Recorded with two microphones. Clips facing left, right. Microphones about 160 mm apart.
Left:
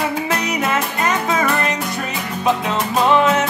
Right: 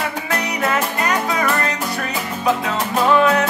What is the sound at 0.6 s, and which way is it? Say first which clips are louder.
Music: even; 20° left (ahead or behind).